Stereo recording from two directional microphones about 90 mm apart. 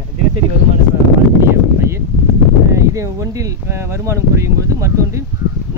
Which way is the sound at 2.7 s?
35° right (ahead or behind).